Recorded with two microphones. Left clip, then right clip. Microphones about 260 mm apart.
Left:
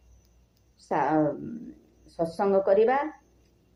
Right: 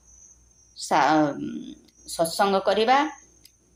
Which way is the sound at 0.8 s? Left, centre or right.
Right.